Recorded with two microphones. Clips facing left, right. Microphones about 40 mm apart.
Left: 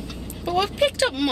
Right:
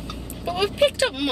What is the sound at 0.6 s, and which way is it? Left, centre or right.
Speech, right.